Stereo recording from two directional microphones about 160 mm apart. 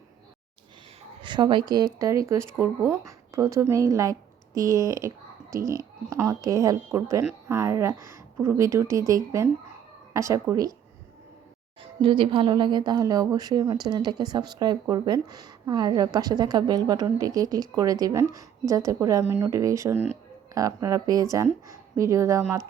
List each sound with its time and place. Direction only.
1.2 s speech: 30° right (ahead or behind)
12.0 s speech: 30° right (ahead or behind)